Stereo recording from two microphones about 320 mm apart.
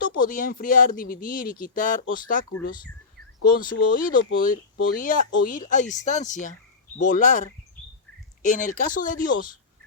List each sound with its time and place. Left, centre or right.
0.0 s speech: left
3.6 s speech: left